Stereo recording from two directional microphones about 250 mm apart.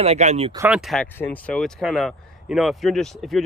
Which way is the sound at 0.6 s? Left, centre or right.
Centre.